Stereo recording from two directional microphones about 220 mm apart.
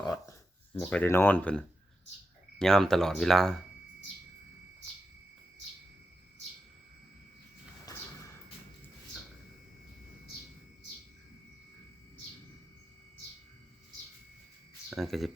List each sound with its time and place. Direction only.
0.1 s speech: 10° left (ahead or behind)
7.9 s a sound: 15° left (ahead or behind)
14.8 s speech: centre (ahead or behind)